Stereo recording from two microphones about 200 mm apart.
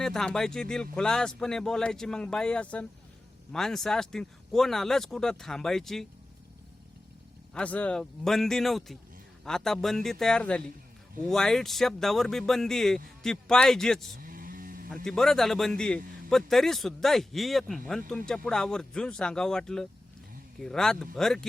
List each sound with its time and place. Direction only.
0.0 s speech: centre (ahead or behind)
7.5 s speech: 5° left (ahead or behind)
14.2 s a sound: 45° right (ahead or behind)
15.0 s speech: 5° left (ahead or behind)